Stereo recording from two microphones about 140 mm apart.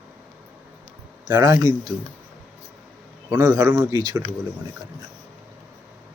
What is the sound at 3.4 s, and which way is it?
Speech, 25° right (ahead or behind).